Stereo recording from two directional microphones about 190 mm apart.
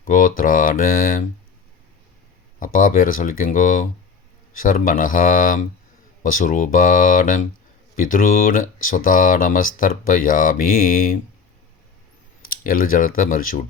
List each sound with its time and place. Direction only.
0.0 s speech: 45° left (ahead or behind)
2.6 s speech: 45° left (ahead or behind)
12.5 s speech: 50° left (ahead or behind)